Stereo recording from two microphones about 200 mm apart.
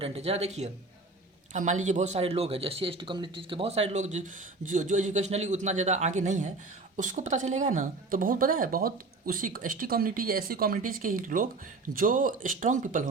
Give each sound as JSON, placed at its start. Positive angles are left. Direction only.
{"t": 0.0, "sound": "a man's voice", "side_deg": -30}